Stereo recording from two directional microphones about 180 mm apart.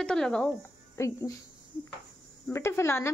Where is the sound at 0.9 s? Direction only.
15° left (ahead or behind).